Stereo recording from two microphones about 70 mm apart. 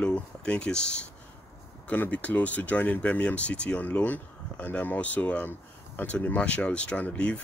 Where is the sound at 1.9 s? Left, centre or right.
Left.